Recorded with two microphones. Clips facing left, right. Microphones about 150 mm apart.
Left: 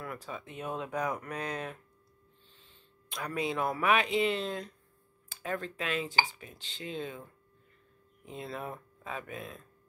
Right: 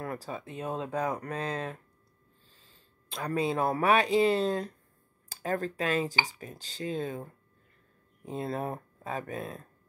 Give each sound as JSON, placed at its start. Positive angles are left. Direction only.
{"t": 0.0, "sound": "speech", "side_deg": -35}
{"t": 2.5, "sound": "a sound", "side_deg": -40}
{"t": 3.8, "sound": "speech", "side_deg": -35}